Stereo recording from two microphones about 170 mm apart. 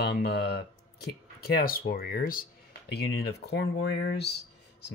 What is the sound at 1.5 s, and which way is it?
Speech, 60° left (ahead or behind).